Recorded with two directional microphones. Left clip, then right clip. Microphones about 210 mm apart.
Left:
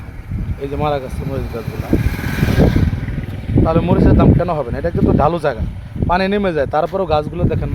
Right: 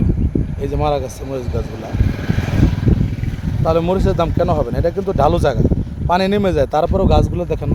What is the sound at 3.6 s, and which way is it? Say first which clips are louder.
Speech: left 1 dB; 20° right (ahead or behind).